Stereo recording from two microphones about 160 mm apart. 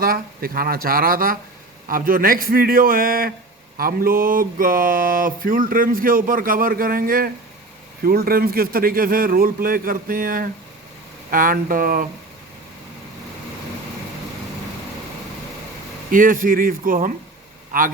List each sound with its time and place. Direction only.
0.0 s mantra: 65° right (ahead or behind)
16.1 s mantra: 60° right (ahead or behind)
17.7 s speech: 60° right (ahead or behind)